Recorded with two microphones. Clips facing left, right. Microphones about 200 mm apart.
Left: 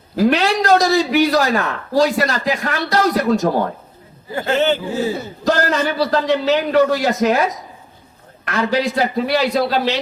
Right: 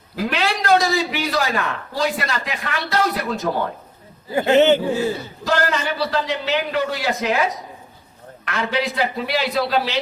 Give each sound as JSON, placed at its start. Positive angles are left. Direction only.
{"t": 0.2, "sound": "a man's voice", "side_deg": 40}
{"t": 4.4, "sound": "a man's voice", "side_deg": -20}
{"t": 5.5, "sound": "a man's voice", "side_deg": 40}
{"t": 8.4, "sound": "a man's voice", "side_deg": 40}